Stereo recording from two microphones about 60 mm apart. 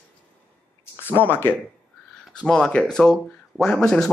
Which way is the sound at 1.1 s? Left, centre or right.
Left.